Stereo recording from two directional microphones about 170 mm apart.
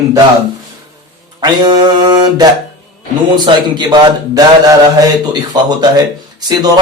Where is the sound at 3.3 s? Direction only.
25° right (ahead or behind).